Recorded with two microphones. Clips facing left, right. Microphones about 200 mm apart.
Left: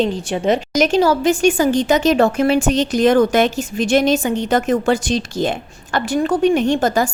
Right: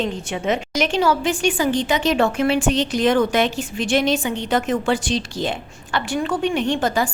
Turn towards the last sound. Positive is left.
turn(degrees=45)  # may be behind; listen again after turning